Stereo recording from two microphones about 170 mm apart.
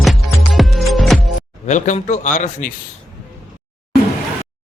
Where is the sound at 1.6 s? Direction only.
45° left (ahead or behind).